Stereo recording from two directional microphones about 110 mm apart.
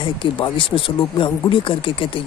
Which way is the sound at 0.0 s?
45° left (ahead or behind).